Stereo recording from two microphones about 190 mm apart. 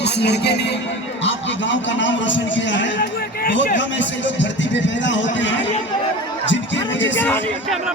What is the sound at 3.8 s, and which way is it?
A man's voice, 75° left (ahead or behind).